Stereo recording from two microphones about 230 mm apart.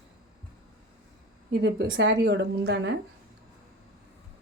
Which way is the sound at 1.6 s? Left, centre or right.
Right.